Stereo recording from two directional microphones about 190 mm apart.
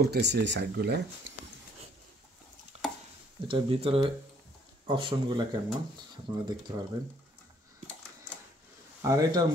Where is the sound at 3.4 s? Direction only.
25° right (ahead or behind).